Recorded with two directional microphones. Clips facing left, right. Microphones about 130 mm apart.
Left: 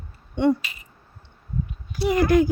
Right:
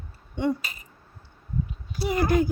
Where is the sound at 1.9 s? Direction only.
90° left.